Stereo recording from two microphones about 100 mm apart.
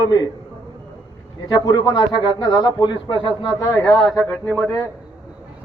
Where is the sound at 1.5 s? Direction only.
45° left (ahead or behind).